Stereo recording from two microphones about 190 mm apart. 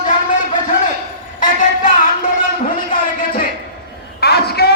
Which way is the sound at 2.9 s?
50° left (ahead or behind).